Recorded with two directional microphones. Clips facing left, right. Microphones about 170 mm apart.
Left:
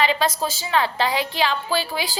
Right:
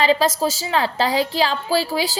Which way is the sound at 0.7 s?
35° right (ahead or behind).